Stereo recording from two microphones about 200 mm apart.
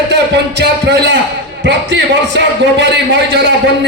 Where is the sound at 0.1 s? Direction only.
60° right (ahead or behind).